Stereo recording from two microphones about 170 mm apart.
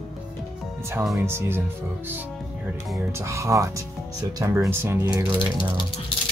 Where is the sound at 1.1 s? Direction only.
15° right (ahead or behind).